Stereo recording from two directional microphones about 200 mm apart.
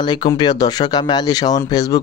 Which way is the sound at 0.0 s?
20° left (ahead or behind).